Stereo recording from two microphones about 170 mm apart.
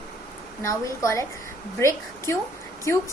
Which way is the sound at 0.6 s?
20° left (ahead or behind).